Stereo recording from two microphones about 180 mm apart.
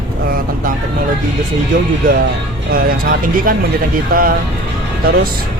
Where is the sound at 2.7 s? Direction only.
50° right (ahead or behind).